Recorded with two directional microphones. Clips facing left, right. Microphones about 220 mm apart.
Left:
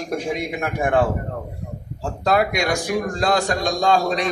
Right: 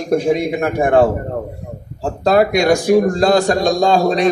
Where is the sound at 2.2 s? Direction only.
35° right (ahead or behind).